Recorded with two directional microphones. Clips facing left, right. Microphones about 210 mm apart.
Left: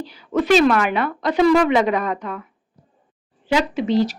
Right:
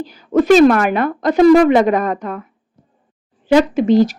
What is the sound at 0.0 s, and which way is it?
Speech, 45° right (ahead or behind).